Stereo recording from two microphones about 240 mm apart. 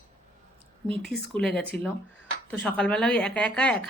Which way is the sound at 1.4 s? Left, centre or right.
Centre.